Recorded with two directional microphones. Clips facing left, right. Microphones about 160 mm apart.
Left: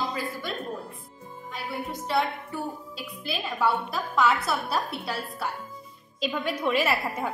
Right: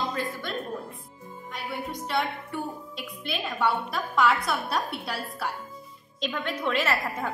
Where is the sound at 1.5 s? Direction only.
Centre (ahead or behind).